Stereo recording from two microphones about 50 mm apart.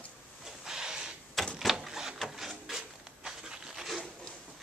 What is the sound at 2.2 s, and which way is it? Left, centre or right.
Rub, centre.